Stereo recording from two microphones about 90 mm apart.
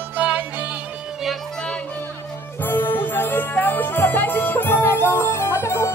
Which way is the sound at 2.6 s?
25° left (ahead or behind).